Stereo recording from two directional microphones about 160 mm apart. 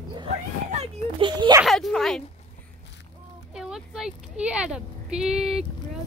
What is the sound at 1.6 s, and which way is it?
Speech, centre (ahead or behind).